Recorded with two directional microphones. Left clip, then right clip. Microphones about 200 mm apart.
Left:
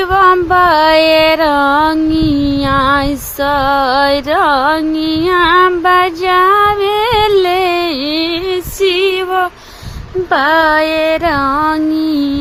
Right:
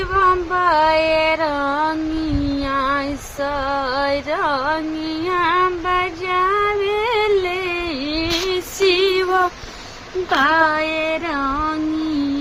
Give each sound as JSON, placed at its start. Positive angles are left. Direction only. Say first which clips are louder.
{"t": 0.1, "sound": "music", "louder": "left 7 dB", "side_deg": 50}
{"t": 5.2, "sound": "female singing", "louder": "left 8 dB", "side_deg": 50}
{"t": 8.8, "sound": "female singing", "louder": "left 3 dB", "side_deg": 45}
{"t": 10.3, "sound": "a sound", "louder": "left 6 dB", "side_deg": 50}